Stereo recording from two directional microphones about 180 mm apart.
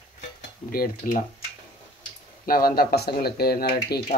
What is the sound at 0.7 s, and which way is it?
Speech, 50° left (ahead or behind).